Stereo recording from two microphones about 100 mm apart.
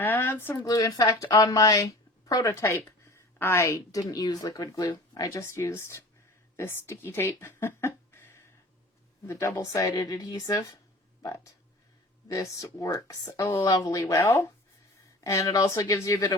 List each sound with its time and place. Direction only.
0.0 s a sound: 20° left (ahead or behind)
0.6 s speech: 35° left (ahead or behind)
14.0 s speech: 25° left (ahead or behind)